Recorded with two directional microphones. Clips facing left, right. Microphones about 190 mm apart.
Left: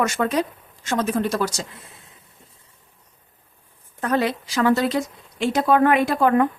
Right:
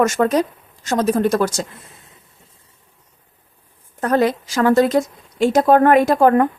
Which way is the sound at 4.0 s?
45° right (ahead or behind).